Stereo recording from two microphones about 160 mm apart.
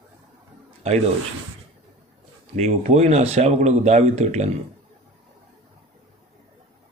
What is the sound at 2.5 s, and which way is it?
A man's voice, 45° right (ahead or behind).